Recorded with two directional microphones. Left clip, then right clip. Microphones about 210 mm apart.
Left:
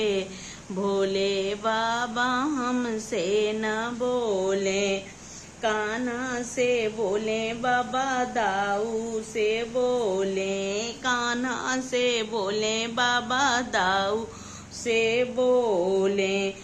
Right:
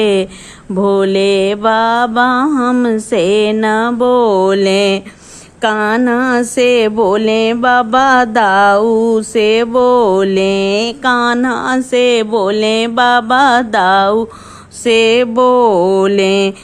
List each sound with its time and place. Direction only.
0.0 s speech: 35° right (ahead or behind)
14.8 s mantra: 45° right (ahead or behind)